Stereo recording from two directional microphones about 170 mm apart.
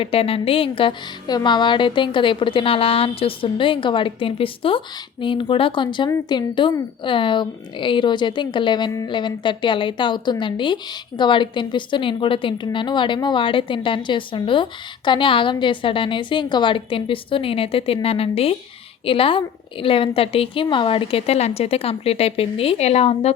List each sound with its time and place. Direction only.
0.0 s a woman's voice: 35° left (ahead or behind)